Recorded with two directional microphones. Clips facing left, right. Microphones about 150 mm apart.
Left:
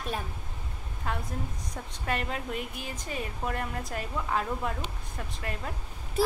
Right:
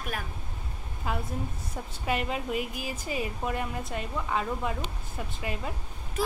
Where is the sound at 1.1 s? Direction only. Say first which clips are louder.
Right 2 dB; 5° right (ahead or behind).